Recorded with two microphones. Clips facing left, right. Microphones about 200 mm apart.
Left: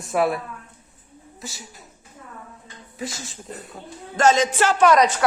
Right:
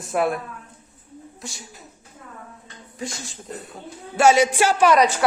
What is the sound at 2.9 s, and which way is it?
Speech, centre (ahead or behind).